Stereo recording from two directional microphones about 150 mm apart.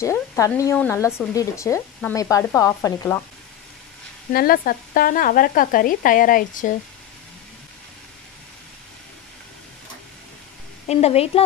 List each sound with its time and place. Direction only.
0.0 s speech: 20° left (ahead or behind)
4.3 s speech: 80° left
10.9 s a woman's voice: 45° left (ahead or behind)